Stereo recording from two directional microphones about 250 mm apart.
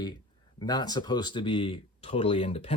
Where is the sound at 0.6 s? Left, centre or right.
Centre.